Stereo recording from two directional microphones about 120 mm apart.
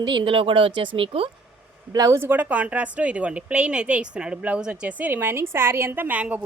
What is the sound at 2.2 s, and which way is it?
A woman's voice, 15° right (ahead or behind).